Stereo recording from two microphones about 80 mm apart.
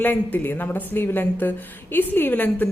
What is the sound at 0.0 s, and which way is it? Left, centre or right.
A woman's voice, left.